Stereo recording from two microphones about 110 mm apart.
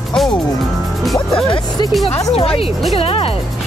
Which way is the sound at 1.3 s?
50° left (ahead or behind).